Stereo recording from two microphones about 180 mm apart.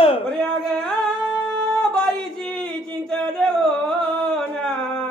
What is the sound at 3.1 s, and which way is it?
Music, 5° left (ahead or behind).